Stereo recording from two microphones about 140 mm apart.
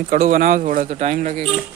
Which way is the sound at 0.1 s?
65° right (ahead or behind).